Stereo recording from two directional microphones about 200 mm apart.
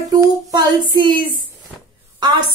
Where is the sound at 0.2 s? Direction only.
20° right (ahead or behind).